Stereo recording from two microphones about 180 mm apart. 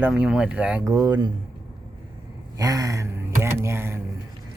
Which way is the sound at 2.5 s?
20° right (ahead or behind).